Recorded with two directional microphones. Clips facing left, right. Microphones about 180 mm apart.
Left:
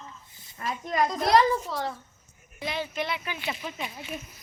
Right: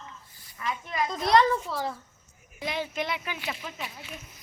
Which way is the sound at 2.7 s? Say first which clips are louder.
Even; 15° right (ahead or behind).